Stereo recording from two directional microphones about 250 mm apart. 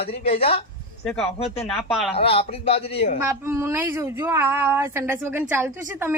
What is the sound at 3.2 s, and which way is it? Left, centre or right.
Speech, centre.